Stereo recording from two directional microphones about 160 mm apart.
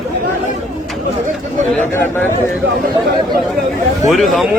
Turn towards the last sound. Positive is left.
turn(degrees=0)  # may be behind; listen again after turning